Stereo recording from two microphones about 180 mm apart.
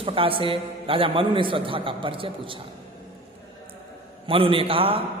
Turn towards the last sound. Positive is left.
turn(degrees=-30)  # may be behind; listen again after turning